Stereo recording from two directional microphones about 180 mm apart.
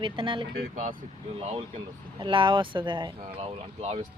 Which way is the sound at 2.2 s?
25° right (ahead or behind).